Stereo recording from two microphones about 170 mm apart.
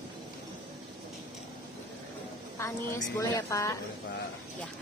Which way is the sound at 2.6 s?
20° left (ahead or behind).